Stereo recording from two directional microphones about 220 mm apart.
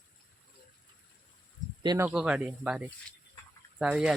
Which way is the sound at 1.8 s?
20° right (ahead or behind).